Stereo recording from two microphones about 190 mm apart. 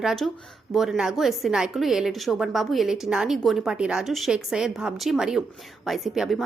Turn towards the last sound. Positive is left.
turn(degrees=0)  # may be behind; listen again after turning